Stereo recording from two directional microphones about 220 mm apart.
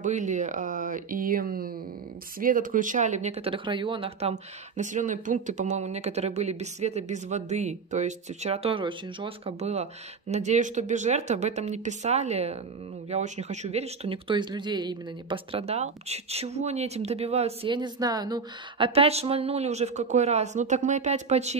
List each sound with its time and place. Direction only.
0.0 s speech: 35° right (ahead or behind)